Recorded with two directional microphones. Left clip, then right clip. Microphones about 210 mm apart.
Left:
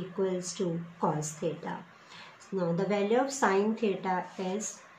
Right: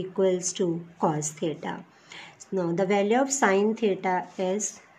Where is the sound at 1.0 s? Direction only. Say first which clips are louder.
Right 4 dB; 55° right (ahead or behind).